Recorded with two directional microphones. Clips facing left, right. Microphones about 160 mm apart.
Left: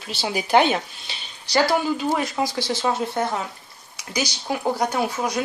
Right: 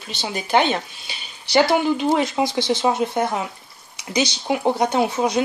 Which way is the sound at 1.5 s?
20° right (ahead or behind).